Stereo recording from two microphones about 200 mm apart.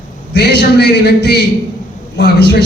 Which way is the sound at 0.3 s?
55° left (ahead or behind).